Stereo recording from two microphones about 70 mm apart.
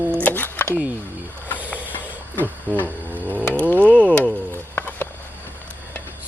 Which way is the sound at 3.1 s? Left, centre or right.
Right.